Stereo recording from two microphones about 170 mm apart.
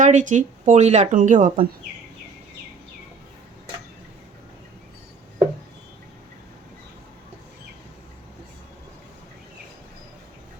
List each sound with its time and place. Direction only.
0.0 s speech: 45° right (ahead or behind)